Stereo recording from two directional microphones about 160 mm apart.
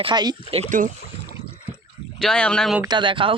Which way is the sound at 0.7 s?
60° right (ahead or behind).